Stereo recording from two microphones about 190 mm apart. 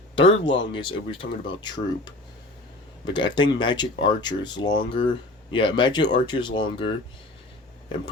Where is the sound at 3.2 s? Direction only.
25° left (ahead or behind).